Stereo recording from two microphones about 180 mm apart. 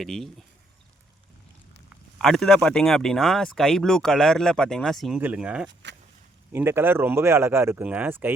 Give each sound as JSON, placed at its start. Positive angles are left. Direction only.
{"t": 0.0, "sound": "speech", "side_deg": 0}
{"t": 2.1, "sound": "speech", "side_deg": 0}
{"t": 5.8, "sound": "a sound", "side_deg": -75}
{"t": 6.5, "sound": "speech", "side_deg": -10}